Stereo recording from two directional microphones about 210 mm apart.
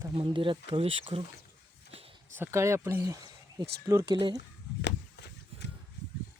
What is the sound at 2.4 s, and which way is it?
Speech, 15° right (ahead or behind).